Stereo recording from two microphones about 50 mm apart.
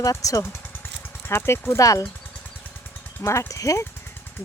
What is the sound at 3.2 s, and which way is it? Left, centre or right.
Speech, left.